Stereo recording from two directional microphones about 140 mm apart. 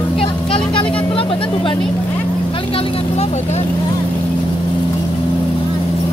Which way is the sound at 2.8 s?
50° left (ahead or behind).